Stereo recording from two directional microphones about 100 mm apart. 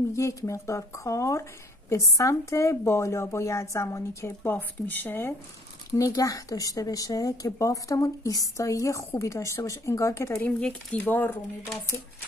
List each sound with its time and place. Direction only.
0.1 s speech: 30° left (ahead or behind)
5.9 s speech: 35° left (ahead or behind)
10.6 s speech: 10° left (ahead or behind)